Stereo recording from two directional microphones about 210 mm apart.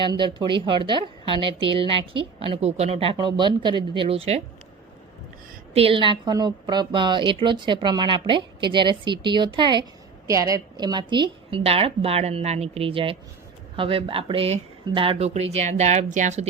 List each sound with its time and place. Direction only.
0.0 s a woman's voice: 25° right (ahead or behind)
5.7 s a woman's voice: 25° right (ahead or behind)